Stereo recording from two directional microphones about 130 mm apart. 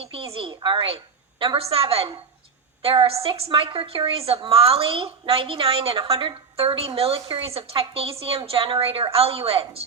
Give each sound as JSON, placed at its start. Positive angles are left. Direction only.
{"t": 0.0, "sound": "a woman's voice", "side_deg": -45}